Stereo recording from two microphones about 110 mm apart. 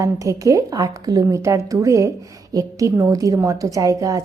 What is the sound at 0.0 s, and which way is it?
A woman's voice, 30° right (ahead or behind).